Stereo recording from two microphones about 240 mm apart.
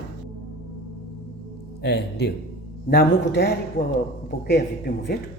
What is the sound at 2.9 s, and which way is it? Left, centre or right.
Speech, left.